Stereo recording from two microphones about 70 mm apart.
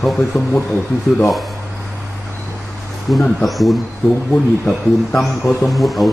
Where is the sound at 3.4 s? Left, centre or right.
Centre.